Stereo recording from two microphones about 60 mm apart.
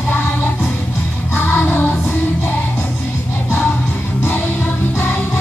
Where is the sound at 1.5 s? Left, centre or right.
Left.